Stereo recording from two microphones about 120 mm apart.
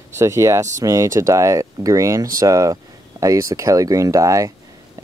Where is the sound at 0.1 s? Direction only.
25° right (ahead or behind).